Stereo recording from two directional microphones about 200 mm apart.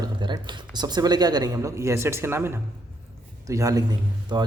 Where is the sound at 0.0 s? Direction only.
20° right (ahead or behind).